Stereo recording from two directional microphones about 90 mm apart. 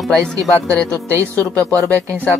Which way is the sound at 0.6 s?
15° left (ahead or behind).